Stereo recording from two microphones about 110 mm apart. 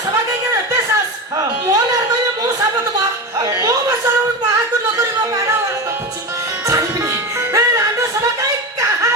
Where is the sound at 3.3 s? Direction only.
35° right (ahead or behind).